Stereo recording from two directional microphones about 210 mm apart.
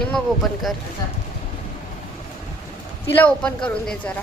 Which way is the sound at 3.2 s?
5° left (ahead or behind).